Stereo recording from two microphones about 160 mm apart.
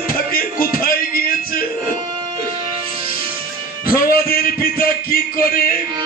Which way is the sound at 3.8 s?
65° left (ahead or behind).